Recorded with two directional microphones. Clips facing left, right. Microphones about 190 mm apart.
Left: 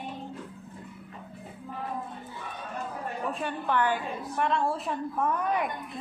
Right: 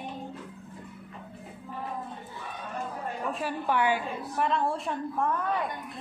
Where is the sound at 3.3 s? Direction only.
5° right (ahead or behind).